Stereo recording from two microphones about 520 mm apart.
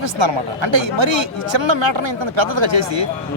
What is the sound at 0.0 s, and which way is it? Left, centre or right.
A man's voice, right.